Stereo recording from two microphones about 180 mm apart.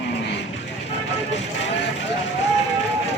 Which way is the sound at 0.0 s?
70° left (ahead or behind).